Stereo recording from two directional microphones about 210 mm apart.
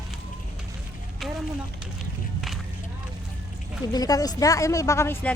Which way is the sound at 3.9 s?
15° left (ahead or behind).